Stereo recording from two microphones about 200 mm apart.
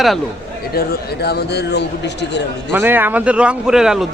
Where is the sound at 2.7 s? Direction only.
10° right (ahead or behind).